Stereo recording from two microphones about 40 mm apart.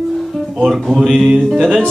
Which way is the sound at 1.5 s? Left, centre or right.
Centre.